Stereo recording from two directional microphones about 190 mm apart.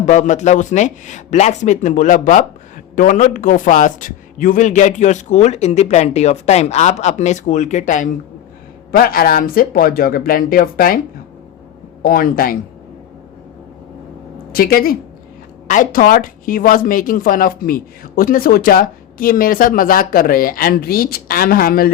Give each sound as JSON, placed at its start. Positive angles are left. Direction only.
{"t": 0.0, "sound": "a man's voice", "side_deg": 40}
{"t": 12.0, "sound": "speech", "side_deg": 50}
{"t": 14.5, "sound": "speech", "side_deg": 50}